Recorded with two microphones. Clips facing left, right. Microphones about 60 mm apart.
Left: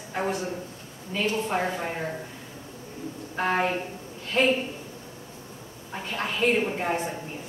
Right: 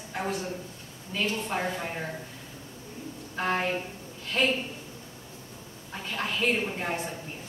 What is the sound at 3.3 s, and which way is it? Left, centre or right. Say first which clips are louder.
Speech: left 3 dB; centre.